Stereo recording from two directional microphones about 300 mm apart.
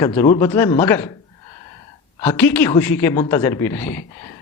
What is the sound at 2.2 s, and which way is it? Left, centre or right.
Speech, centre.